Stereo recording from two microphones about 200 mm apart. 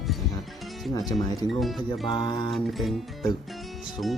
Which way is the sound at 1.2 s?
20° left (ahead or behind).